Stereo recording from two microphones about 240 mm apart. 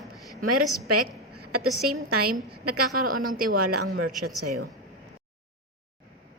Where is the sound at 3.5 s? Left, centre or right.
Right.